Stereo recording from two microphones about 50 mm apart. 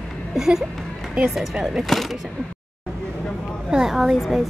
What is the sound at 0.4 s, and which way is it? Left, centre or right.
Speech, centre.